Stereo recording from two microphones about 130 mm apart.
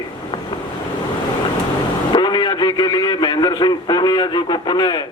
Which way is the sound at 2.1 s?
35° left (ahead or behind).